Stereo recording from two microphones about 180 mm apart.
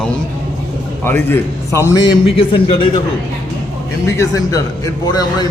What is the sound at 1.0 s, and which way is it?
A man's voice, 10° left (ahead or behind).